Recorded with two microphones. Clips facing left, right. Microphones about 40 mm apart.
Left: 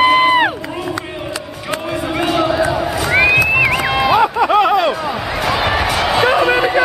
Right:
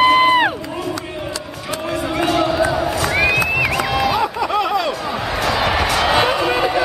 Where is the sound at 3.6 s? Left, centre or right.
Left.